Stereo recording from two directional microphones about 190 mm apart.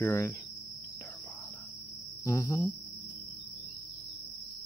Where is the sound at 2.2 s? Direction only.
15° left (ahead or behind).